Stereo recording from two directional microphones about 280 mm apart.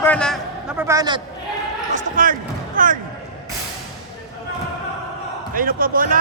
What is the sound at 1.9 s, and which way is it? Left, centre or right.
Speech, right.